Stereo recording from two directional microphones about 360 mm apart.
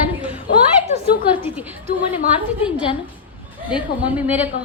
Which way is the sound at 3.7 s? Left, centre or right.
Centre.